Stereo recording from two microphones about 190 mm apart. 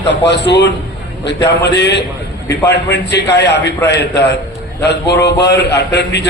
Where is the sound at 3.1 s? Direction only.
65° left (ahead or behind).